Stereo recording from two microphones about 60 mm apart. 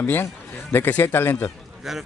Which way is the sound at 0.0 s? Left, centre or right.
Left.